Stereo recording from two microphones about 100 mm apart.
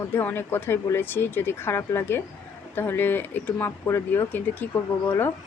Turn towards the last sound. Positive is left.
turn(degrees=20)  # may be behind; listen again after turning